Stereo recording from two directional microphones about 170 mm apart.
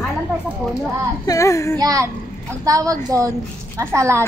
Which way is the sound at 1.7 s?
20° right (ahead or behind).